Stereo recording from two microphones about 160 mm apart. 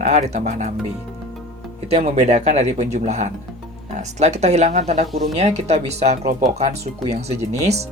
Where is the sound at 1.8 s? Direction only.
40° right (ahead or behind).